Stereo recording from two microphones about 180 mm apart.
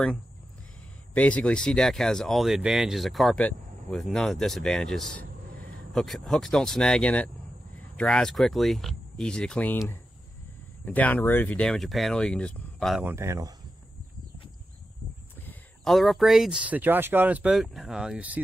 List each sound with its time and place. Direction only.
1.1 s speech: 5° left (ahead or behind)
5.2 s a sound: 60° right (ahead or behind)
5.9 s speech: centre (ahead or behind)
13.1 s speech: 15° right (ahead or behind)
15.4 s speech: centre (ahead or behind)